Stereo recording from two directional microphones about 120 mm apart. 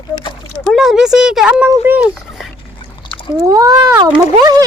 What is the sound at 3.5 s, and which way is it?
Speech, 30° right (ahead or behind).